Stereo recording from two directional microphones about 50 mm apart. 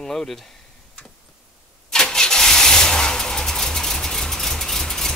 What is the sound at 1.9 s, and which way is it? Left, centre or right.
Vehicle, centre.